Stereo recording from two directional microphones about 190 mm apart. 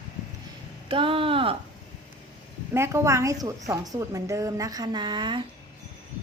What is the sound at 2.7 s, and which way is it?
A woman's voice, 15° right (ahead or behind).